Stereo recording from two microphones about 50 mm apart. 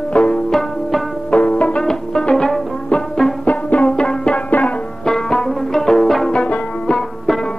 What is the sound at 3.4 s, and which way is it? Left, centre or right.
Music, left.